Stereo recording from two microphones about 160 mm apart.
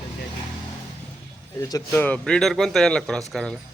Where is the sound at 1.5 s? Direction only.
20° left (ahead or behind).